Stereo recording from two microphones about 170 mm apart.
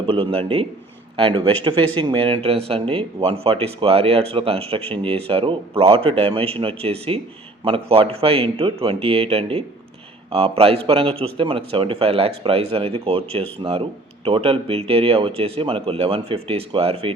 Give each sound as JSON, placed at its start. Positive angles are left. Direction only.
{"t": 0.0, "sound": "a man's voice", "side_deg": -35}
{"t": 13.6, "sound": "a man's voice", "side_deg": -25}